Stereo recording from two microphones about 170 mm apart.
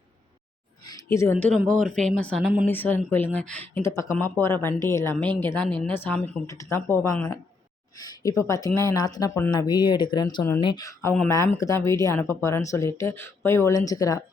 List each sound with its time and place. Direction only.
0.9 s speech: 20° left (ahead or behind); by 2.6 s 5° right (ahead or behind)
2.6 s speech: 10° left (ahead or behind)